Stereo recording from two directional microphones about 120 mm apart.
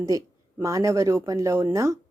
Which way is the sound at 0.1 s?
30° right (ahead or behind).